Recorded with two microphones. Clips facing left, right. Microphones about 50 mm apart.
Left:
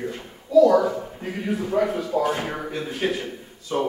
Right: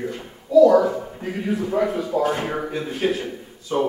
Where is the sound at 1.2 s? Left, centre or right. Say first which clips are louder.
Right 2 dB; centre.